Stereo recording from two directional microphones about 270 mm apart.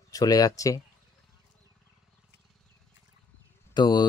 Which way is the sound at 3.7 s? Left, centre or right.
Centre.